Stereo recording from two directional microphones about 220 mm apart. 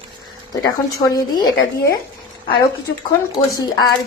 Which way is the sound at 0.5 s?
15° left (ahead or behind).